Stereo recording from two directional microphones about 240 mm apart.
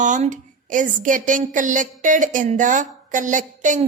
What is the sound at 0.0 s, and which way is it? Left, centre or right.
A woman's voice, right.